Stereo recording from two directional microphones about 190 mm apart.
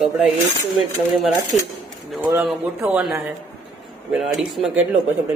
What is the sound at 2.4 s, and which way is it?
A man's voice, 5° right (ahead or behind).